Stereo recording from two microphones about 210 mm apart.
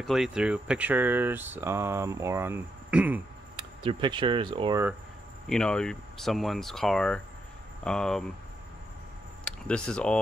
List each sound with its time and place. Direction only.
0.0 s speech: centre (ahead or behind)
3.5 s speech: 25° right (ahead or behind)
5.5 s speech: 5° left (ahead or behind)
9.4 s speech: 5° left (ahead or behind)